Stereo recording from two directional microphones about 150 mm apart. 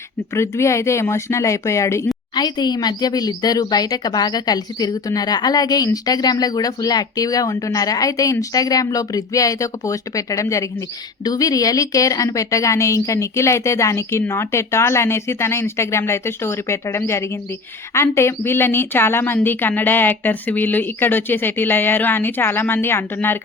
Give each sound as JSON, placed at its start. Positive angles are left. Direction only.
{"t": 0.3, "sound": "a woman's voice", "side_deg": 20}